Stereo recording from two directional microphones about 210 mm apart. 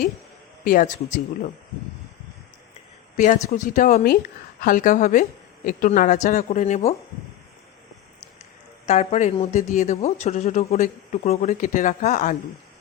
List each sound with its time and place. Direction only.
0.6 s a man's voice: 40° left (ahead or behind)
3.2 s a man's voice: 40° left (ahead or behind)
8.9 s a man's voice: 30° left (ahead or behind)